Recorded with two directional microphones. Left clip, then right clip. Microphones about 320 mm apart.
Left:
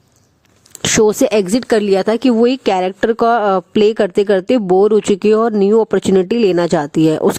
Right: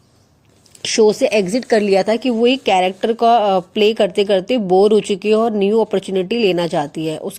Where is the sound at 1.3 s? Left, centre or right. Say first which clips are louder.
Left 2 dB; left.